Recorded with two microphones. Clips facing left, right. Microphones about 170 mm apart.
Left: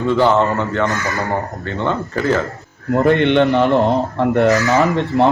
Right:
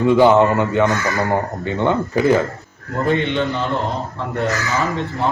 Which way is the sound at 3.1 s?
60° left (ahead or behind).